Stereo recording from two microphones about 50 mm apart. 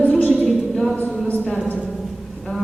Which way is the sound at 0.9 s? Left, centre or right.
Left.